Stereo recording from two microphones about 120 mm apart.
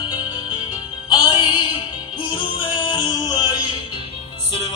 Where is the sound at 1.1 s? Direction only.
45° left (ahead or behind).